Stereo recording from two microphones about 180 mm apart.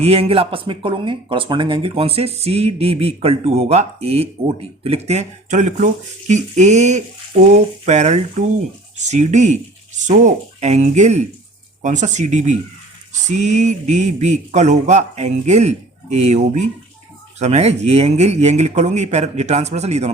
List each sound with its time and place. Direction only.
0.0 s speech: 35° right (ahead or behind)